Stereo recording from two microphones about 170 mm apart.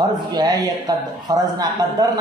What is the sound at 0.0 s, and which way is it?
A man's voice, 25° right (ahead or behind).